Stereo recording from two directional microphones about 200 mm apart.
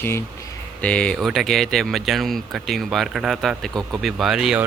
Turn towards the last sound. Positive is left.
turn(degrees=0)  # may be behind; listen again after turning